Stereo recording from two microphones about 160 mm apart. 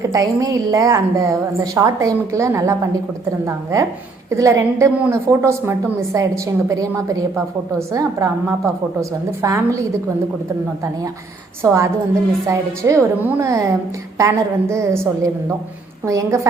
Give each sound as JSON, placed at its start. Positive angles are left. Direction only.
{"t": 0.1, "sound": "a woman's voice", "side_deg": -20}
{"t": 11.6, "sound": "a woman's voice", "side_deg": -15}